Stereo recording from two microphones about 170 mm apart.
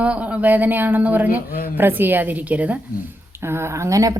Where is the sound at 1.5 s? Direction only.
55° left (ahead or behind).